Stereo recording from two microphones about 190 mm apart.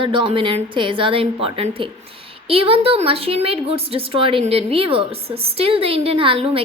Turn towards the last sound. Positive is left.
turn(degrees=-30)  # may be behind; listen again after turning